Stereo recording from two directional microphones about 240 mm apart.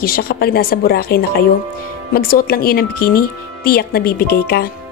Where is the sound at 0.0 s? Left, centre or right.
Left.